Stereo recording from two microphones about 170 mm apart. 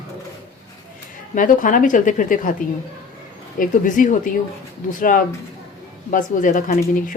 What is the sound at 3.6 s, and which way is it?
Speech, 50° left (ahead or behind).